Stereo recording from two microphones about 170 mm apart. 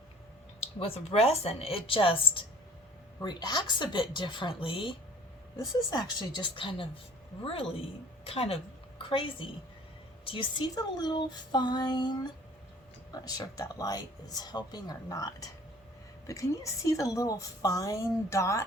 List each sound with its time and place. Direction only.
0.6 s a woman's voice: 35° left (ahead or behind); by 18.6 s 15° left (ahead or behind)